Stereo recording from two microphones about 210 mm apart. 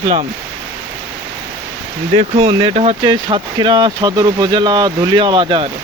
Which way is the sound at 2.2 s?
25° right (ahead or behind).